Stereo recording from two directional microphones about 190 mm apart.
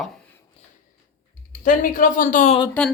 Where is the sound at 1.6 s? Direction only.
45° left (ahead or behind).